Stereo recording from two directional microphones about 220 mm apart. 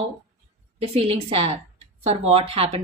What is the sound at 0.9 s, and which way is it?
A woman's voice, 25° right (ahead or behind).